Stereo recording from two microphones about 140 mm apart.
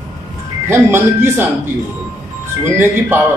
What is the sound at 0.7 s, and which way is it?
Speech, 15° right (ahead or behind).